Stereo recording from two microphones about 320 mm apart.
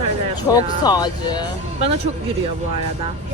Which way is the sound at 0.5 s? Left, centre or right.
Centre.